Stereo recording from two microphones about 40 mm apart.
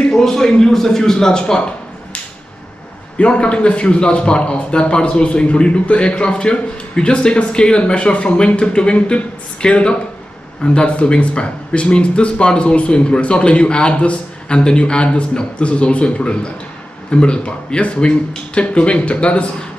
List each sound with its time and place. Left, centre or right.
0.1 s a man's voice: centre
3.2 s a man's voice: left